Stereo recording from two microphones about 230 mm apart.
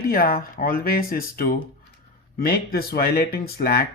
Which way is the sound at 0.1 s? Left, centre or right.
Left.